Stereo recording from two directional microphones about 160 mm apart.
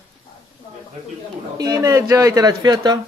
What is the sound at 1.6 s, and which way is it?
Speech, 20° right (ahead or behind).